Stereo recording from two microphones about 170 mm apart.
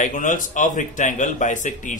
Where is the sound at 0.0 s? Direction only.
50° left (ahead or behind).